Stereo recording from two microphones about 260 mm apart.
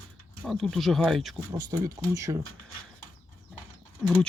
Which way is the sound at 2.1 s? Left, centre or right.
Centre.